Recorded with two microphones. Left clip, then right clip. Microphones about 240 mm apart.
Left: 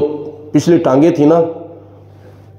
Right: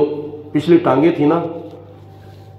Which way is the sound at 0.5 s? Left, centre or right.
Left.